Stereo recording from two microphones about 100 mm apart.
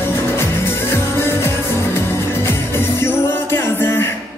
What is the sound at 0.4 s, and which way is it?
Music, 25° left (ahead or behind).